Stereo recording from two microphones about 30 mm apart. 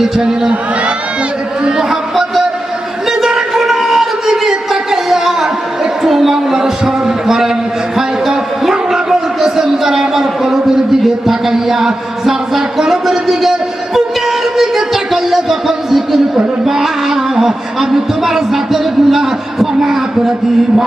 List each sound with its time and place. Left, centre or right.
0.0 s speech: right
1.9 s music: centre
3.1 s a sound: centre
11.0 s music: centre
14.9 s a sound: centre
16.6 s music: centre